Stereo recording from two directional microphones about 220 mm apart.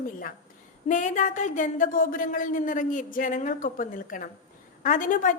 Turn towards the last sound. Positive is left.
turn(degrees=35)  # may be behind; listen again after turning